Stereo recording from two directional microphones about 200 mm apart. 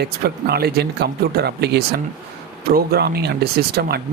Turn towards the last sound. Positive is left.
turn(degrees=-50)  # may be behind; listen again after turning